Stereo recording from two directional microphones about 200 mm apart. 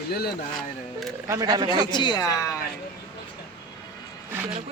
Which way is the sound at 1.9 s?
20° left (ahead or behind).